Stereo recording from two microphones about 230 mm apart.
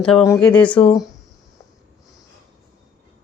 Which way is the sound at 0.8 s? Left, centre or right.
Left.